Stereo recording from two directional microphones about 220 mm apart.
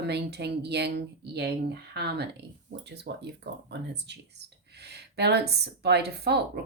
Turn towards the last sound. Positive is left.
turn(degrees=-50)  # may be behind; listen again after turning